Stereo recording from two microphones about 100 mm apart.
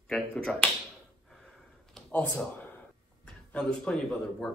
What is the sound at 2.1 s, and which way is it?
Speech, 15° left (ahead or behind).